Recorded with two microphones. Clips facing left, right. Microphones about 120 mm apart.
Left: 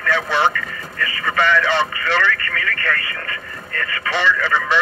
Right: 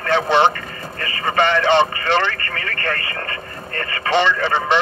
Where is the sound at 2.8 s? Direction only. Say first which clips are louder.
Even; 40° right (ahead or behind).